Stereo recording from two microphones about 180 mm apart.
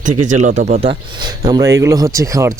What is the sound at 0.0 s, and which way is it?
Speech, 45° right (ahead or behind).